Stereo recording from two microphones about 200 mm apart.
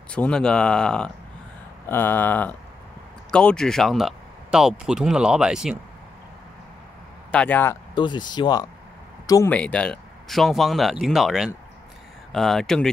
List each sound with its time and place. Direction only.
0.1 s speech: 5° left (ahead or behind)
7.2 s speech: 10° left (ahead or behind)
7.9 s speech: 20° left (ahead or behind)
9.3 s speech: 10° left (ahead or behind)